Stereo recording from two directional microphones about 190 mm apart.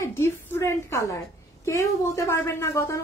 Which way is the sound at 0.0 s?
15° left (ahead or behind).